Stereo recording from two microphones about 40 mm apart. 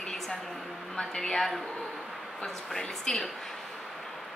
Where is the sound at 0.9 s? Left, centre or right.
Centre.